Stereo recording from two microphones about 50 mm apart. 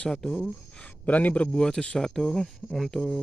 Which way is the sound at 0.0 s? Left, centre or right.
Centre.